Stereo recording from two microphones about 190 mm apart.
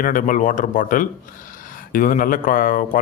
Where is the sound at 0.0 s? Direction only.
45° left (ahead or behind).